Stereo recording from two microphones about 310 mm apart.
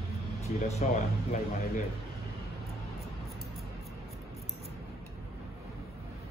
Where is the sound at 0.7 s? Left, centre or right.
Left.